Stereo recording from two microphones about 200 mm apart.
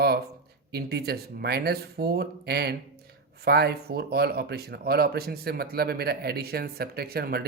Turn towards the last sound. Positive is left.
turn(degrees=-50)  # may be behind; listen again after turning